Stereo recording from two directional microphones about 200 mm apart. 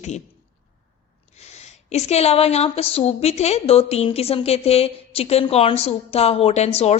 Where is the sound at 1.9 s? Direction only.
30° left (ahead or behind).